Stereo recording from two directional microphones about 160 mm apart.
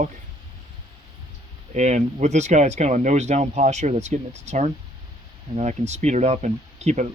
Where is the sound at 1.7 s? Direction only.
45° right (ahead or behind).